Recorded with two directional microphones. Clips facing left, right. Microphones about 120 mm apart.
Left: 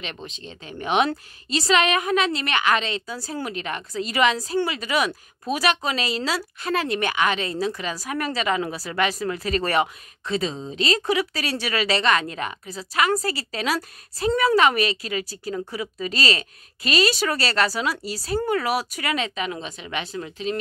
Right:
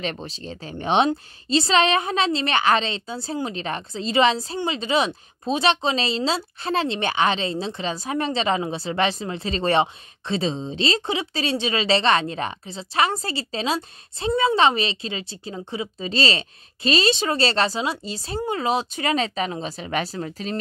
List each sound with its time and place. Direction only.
0.0 s speech: 35° right (ahead or behind)